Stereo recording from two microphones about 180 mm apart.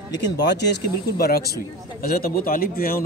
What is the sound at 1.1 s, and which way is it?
A man's voice, 60° left (ahead or behind).